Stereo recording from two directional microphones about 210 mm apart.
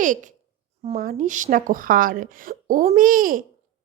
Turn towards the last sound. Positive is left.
turn(degrees=-40)  # may be behind; listen again after turning